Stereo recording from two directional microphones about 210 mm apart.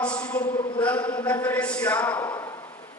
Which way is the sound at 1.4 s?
5° left (ahead or behind).